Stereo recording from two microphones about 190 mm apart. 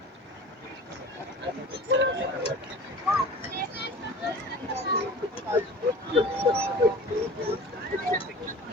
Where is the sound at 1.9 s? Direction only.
70° right (ahead or behind).